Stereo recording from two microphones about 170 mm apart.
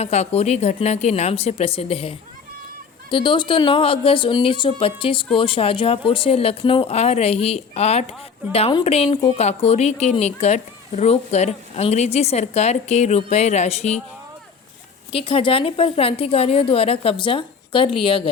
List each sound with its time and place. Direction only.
0.0 s speech: 40° left (ahead or behind)
15.1 s speech: 30° left (ahead or behind)